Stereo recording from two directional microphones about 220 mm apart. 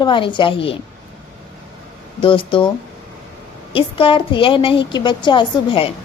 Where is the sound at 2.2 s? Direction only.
25° left (ahead or behind).